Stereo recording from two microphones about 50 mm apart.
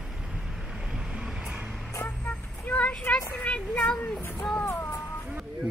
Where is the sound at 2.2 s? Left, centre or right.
Left.